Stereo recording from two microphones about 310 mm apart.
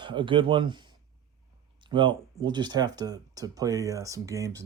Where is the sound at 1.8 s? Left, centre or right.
Centre.